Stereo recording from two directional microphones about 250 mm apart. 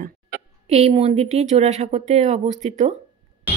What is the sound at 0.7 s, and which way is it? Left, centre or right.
Speech, right.